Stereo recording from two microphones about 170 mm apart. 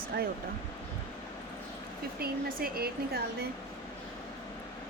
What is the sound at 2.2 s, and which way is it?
Speech, 60° right (ahead or behind).